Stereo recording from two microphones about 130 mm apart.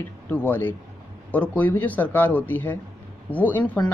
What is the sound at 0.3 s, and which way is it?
Speech, 15° left (ahead or behind).